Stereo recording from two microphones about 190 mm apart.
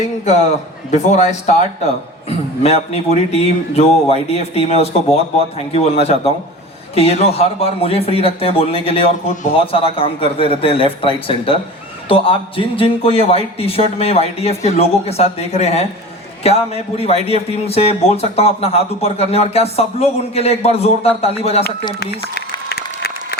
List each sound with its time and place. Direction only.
0.9 s a man's voice: 40° left (ahead or behind)
2.6 s a man's voice: 35° left (ahead or behind)
22.0 s speech: 60° left (ahead or behind)
22.7 s applause: 55° left (ahead or behind)